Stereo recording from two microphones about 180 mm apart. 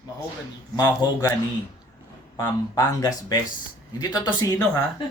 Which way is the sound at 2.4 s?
20° left (ahead or behind).